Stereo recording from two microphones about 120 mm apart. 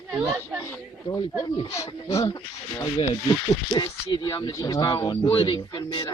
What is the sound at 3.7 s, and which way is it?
Speech, 35° left (ahead or behind).